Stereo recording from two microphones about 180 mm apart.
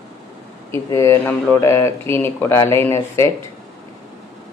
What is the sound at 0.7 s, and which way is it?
Speech, 15° left (ahead or behind).